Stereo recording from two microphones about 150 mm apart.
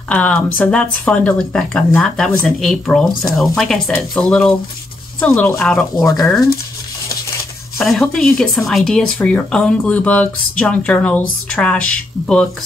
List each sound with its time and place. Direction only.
0.1 s speech: 5° left (ahead or behind)
6.0 s speech: 25° left (ahead or behind)
7.8 s speech: centre (ahead or behind)